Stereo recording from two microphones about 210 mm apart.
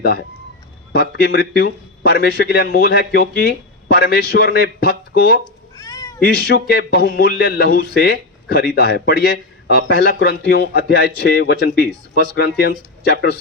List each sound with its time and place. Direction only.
0.9 s a man's voice: 50° left (ahead or behind)
5.7 s cat: 15° left (ahead or behind)
6.2 s a man's voice: 45° left (ahead or behind)